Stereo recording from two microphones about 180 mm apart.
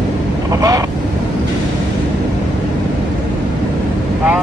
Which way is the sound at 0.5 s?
20° right (ahead or behind).